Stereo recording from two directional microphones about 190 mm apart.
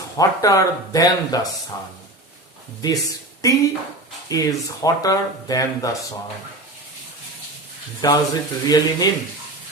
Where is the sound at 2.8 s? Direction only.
20° left (ahead or behind).